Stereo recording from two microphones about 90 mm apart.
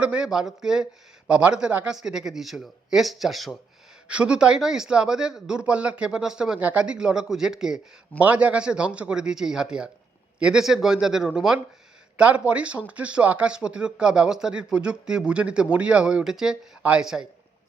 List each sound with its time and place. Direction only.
0.0 s speech: 10° right (ahead or behind)